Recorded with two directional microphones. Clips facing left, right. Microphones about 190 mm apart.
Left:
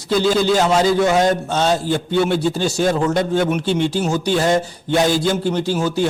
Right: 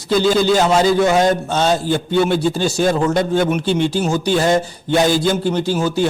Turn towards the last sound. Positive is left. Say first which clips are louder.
# right 1 dB
turn(degrees=-10)  # may be behind; listen again after turning